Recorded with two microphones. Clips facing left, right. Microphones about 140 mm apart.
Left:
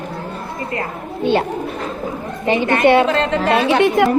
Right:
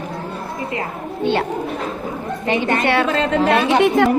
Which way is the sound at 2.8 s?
20° left (ahead or behind).